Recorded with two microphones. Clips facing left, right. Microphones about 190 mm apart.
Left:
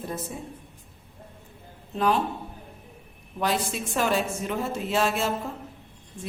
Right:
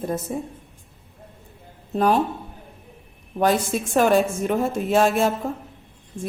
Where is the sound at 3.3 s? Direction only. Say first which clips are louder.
Right 7 dB; 50° right (ahead or behind).